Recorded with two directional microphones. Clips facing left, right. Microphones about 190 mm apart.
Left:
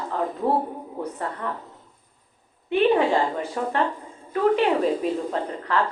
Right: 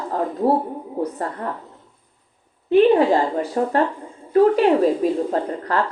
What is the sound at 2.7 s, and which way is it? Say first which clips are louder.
A woman's voice: right 5 dB; 40° right (ahead or behind).